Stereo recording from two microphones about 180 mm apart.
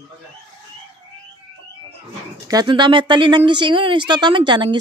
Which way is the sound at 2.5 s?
25° right (ahead or behind).